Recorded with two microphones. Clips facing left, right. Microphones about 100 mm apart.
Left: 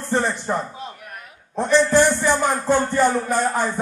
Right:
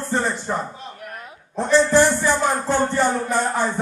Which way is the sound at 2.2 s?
Centre (ahead or behind).